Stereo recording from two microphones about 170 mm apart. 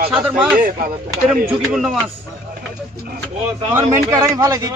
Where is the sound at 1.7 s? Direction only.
Centre (ahead or behind).